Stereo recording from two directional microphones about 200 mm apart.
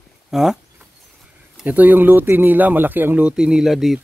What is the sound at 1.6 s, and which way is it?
Speech, 10° right (ahead or behind).